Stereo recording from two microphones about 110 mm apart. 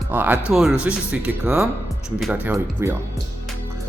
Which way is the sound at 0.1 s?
15° right (ahead or behind).